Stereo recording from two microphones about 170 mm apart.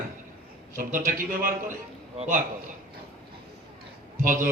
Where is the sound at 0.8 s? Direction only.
50° right (ahead or behind).